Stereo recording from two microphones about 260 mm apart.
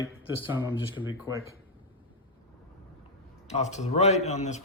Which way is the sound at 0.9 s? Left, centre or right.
Left.